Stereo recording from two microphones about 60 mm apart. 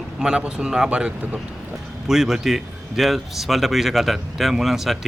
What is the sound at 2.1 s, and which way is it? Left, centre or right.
Speech, centre.